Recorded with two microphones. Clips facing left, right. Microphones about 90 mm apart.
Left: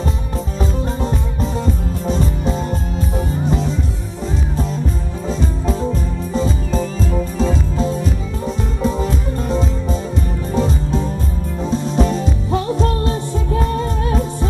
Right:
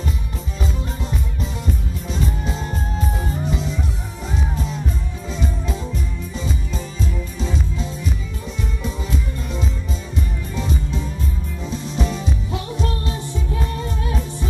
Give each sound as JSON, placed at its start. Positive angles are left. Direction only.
{"t": 2.0, "sound": "music", "side_deg": 40}
{"t": 6.3, "sound": "music", "side_deg": 40}